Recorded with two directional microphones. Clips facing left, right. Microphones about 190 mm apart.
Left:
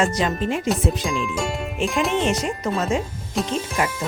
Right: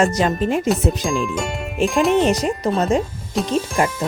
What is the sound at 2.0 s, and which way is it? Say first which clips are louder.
Speech: right 7 dB; centre (ahead or behind).